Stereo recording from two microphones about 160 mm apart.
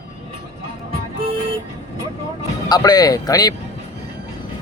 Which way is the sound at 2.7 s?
25° left (ahead or behind).